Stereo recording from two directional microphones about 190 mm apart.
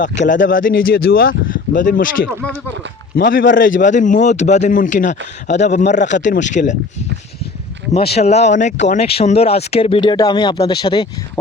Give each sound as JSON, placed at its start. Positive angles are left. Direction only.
{"t": 0.2, "sound": "speech", "side_deg": 45}
{"t": 3.2, "sound": "a man's voice", "side_deg": 75}
{"t": 3.5, "sound": "speech", "side_deg": 45}
{"t": 7.9, "sound": "speech", "side_deg": 30}